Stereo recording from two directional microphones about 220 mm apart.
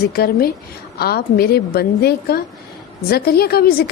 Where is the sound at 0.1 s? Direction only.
45° left (ahead or behind).